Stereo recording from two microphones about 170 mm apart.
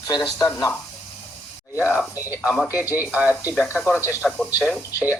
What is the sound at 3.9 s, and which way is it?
Speech, 15° left (ahead or behind).